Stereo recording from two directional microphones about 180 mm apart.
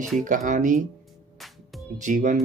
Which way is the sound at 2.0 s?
45° right (ahead or behind).